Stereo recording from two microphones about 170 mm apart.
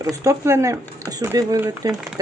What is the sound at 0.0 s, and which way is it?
Speech, 20° right (ahead or behind).